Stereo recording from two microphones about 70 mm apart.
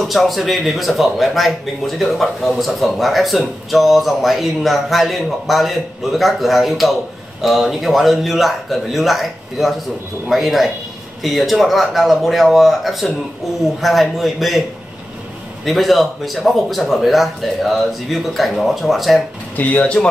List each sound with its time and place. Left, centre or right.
0.0 s speech: centre
15.6 s speech: centre
19.5 s speech: left